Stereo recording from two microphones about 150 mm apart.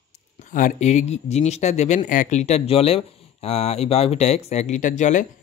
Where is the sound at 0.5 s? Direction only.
60° left (ahead or behind).